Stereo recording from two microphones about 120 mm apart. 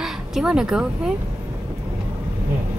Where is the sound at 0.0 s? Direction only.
5° right (ahead or behind).